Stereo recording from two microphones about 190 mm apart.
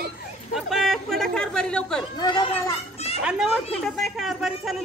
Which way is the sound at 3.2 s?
Centre (ahead or behind).